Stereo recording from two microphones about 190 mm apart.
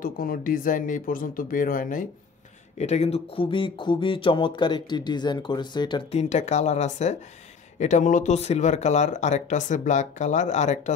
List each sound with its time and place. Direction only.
0.0 s speech: 50° left (ahead or behind)
2.8 s speech: 35° left (ahead or behind)
6.2 s speech: 35° left (ahead or behind)